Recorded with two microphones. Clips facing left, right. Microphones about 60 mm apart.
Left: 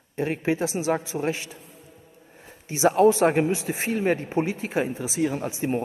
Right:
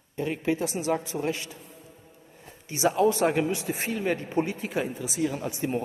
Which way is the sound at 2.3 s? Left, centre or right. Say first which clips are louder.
Left 1 dB; left.